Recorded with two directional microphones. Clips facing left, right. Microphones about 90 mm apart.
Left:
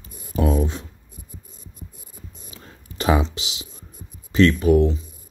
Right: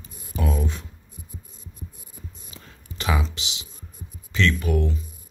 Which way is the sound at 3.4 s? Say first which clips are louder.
Left 2 dB; 30° right (ahead or behind).